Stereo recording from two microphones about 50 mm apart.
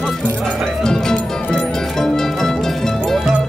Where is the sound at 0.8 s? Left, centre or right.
Centre.